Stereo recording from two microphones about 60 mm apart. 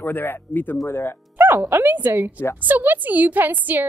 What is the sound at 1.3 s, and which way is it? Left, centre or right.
A woman's voice, right.